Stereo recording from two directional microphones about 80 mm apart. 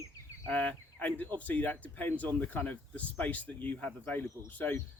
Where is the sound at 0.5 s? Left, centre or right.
Centre.